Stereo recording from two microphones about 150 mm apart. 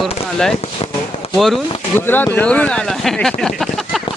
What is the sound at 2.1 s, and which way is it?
Speech, 15° left (ahead or behind).